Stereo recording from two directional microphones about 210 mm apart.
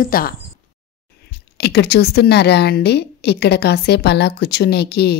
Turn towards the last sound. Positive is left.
turn(degrees=50)  # may be behind; listen again after turning